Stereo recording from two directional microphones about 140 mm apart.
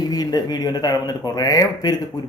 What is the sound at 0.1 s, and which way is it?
A man's voice, 30° left (ahead or behind).